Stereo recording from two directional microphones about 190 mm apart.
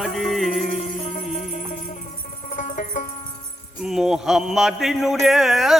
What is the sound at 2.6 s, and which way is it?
Music, 40° left (ahead or behind).